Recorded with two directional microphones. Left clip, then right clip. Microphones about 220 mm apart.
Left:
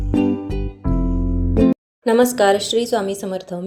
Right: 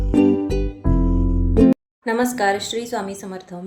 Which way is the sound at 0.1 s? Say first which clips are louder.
Right 3 dB; 5° right (ahead or behind).